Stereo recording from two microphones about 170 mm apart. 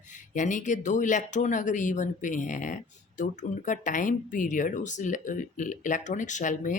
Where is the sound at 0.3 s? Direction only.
45° left (ahead or behind).